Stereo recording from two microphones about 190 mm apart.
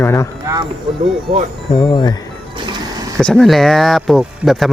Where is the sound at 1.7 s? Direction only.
25° left (ahead or behind).